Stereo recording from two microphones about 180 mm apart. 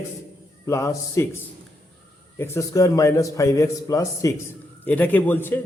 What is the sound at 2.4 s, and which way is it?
A man's voice, 15° left (ahead or behind).